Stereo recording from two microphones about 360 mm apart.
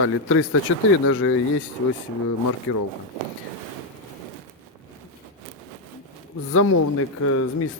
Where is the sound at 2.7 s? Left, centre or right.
Left.